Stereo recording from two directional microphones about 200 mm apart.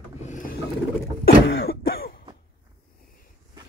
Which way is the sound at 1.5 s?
55° left (ahead or behind).